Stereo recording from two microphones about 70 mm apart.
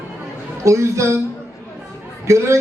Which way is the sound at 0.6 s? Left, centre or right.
Right.